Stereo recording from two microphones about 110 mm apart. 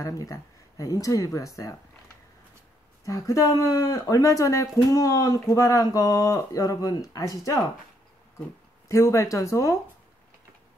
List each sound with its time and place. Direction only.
0.0 s speech: 30° left (ahead or behind)
3.1 s speech: 30° left (ahead or behind)
8.8 s speech: 30° left (ahead or behind)